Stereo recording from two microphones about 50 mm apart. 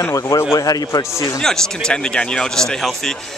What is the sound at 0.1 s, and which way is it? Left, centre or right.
Speech, left.